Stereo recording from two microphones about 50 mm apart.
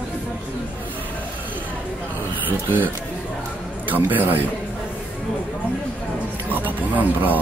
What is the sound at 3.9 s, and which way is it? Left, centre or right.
Speech, right.